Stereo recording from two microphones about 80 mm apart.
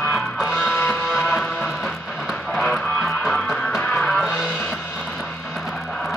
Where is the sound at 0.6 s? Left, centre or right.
Centre.